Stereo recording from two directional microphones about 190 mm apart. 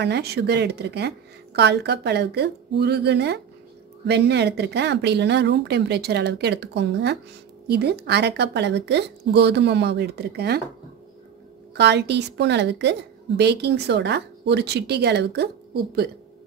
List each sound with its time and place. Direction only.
0.0 s a woman's voice: 60° right (ahead or behind)
11.7 s a woman's voice: 65° right (ahead or behind)